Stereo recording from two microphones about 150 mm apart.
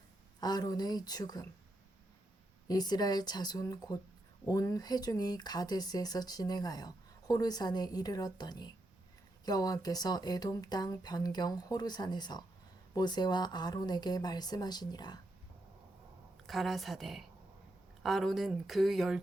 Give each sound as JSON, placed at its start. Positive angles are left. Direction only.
{"t": 0.3, "sound": "speech", "side_deg": 25}
{"t": 2.6, "sound": "speech", "side_deg": 25}
{"t": 16.5, "sound": "speech", "side_deg": 0}